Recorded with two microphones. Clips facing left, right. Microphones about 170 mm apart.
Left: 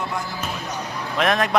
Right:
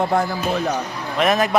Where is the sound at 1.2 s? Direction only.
5° right (ahead or behind).